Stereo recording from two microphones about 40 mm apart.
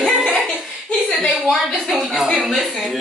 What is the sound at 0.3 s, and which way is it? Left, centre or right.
Laughter, centre.